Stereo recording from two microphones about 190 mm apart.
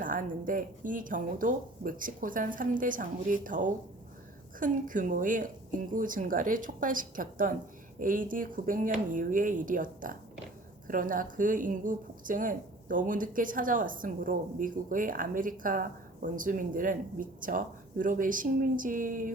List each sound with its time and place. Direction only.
0.0 s speech: 45° right (ahead or behind)